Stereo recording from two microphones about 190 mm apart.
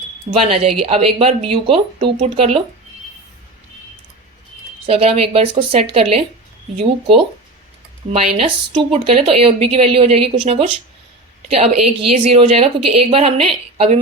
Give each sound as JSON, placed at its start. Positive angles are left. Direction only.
{"t": 0.3, "sound": "speech", "side_deg": -30}
{"t": 4.9, "sound": "speech", "side_deg": -30}
{"t": 8.1, "sound": "speech", "side_deg": -30}